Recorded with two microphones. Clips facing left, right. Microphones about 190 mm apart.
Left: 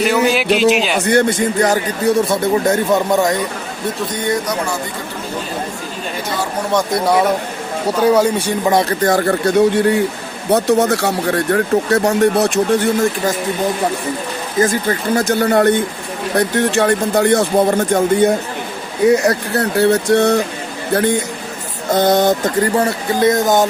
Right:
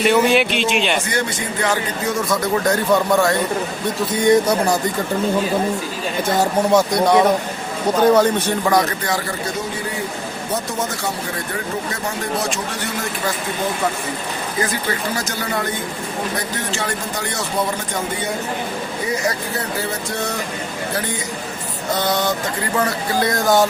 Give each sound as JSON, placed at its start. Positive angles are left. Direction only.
{"t": 0.0, "sound": "a man's voice", "side_deg": 0}
{"t": 1.0, "sound": "speech", "side_deg": 55}
{"t": 6.7, "sound": "a man's voice", "side_deg": 0}
{"t": 8.7, "sound": "speech", "side_deg": 30}
{"t": 9.0, "sound": "speech", "side_deg": 55}
{"t": 14.6, "sound": "speech", "side_deg": 45}
{"t": 19.0, "sound": "speech", "side_deg": 65}
{"t": 22.7, "sound": "speech", "side_deg": 30}